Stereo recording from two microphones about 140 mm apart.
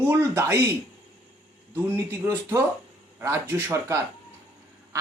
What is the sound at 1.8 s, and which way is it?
A man's voice, 20° right (ahead or behind).